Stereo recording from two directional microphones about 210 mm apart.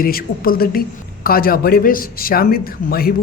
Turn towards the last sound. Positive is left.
turn(degrees=45)  # may be behind; listen again after turning